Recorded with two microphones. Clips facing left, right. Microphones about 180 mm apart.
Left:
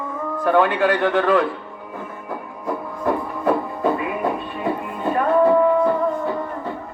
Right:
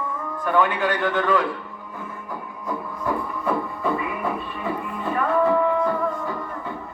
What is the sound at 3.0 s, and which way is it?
Music, 35° left (ahead or behind).